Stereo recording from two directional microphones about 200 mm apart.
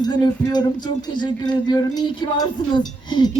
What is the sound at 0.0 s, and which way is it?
Speech, 20° left (ahead or behind).